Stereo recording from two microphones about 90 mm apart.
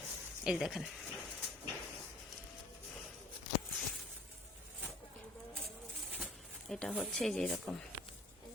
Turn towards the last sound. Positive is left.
turn(degrees=5)  # may be behind; listen again after turning